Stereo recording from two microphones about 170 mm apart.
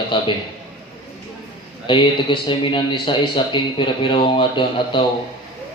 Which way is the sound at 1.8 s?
30° left (ahead or behind).